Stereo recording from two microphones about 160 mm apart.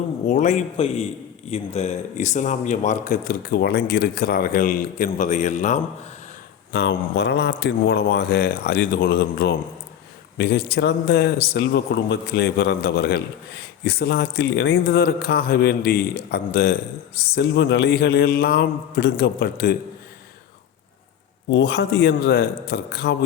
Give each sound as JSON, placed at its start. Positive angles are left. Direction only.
{"t": 0.3, "sound": "speech", "side_deg": 50}
{"t": 6.7, "sound": "a man's voice", "side_deg": 90}
{"t": 17.3, "sound": "a man's voice", "side_deg": 90}
{"t": 21.6, "sound": "a man's voice", "side_deg": 90}